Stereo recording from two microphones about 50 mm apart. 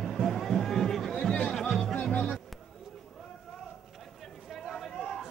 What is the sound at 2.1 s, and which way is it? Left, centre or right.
Music, left.